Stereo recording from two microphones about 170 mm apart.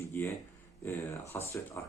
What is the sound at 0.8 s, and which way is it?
Speech, 15° left (ahead or behind).